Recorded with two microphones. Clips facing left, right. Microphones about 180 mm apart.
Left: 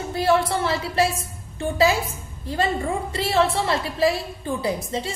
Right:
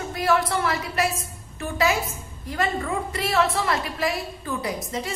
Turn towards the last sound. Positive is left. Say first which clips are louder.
# left 3 dB
turn(degrees=30)  # may be behind; listen again after turning